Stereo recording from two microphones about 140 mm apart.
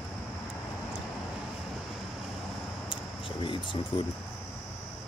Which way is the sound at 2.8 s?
35° left (ahead or behind).